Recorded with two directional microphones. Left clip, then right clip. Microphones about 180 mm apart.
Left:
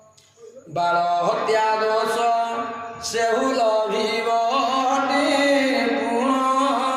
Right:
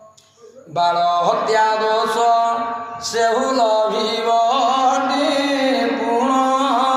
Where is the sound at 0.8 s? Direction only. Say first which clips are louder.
Right 4 dB; 20° left (ahead or behind).